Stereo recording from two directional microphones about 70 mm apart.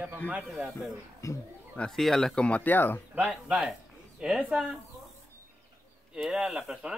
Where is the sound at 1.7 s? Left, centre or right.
Centre; by 3.0 s left.